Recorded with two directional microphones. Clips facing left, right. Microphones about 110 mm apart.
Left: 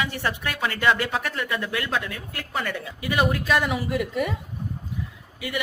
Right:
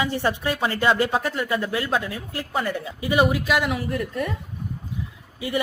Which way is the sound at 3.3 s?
5° right (ahead or behind).